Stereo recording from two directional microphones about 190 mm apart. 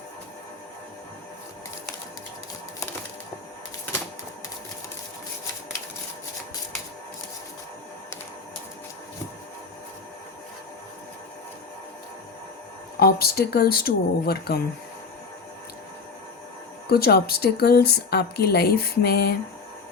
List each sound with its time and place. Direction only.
13.0 s speech: 55° left (ahead or behind)
16.9 s speech: 55° left (ahead or behind)